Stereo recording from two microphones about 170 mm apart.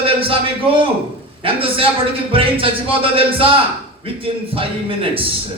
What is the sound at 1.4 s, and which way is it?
A man's voice, 30° right (ahead or behind).